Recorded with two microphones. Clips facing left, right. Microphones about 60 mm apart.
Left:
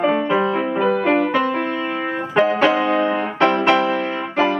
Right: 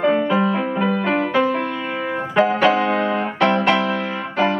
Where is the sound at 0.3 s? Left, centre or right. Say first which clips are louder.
Left 1 dB; centre.